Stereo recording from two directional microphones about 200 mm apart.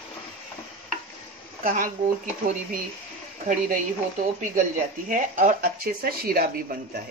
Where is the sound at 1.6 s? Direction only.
40° right (ahead or behind).